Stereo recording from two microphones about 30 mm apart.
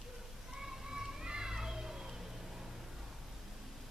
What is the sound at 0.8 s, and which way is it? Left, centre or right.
Children playing, right.